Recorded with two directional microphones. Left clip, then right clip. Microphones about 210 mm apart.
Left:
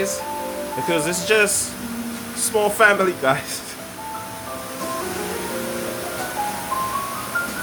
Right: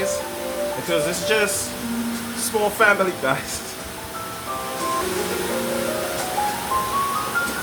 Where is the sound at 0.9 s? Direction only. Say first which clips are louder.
Left 2 dB; 35° left (ahead or behind).